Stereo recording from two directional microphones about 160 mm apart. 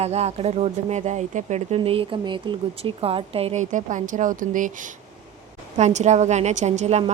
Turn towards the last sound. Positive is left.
turn(degrees=-45)  # may be behind; listen again after turning